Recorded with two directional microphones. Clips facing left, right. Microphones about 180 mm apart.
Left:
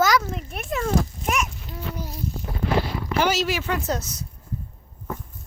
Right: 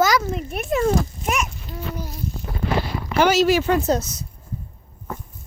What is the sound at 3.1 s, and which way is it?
Speech, 60° right (ahead or behind).